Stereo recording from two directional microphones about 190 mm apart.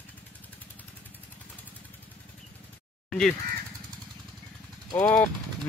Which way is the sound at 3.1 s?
5° left (ahead or behind).